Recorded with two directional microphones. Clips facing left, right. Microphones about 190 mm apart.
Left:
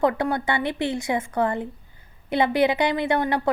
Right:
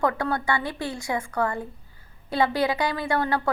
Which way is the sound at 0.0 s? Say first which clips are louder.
Left 3 dB; 20° left (ahead or behind).